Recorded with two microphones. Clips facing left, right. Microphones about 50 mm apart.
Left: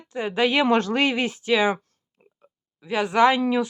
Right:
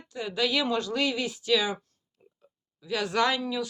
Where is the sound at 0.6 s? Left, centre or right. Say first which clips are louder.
Left 7 dB; left.